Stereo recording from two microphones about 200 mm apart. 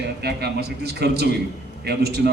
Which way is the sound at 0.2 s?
55° right (ahead or behind).